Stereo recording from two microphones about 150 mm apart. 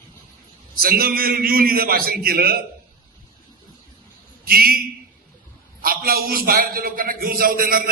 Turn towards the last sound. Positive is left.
turn(degrees=-70)  # may be behind; listen again after turning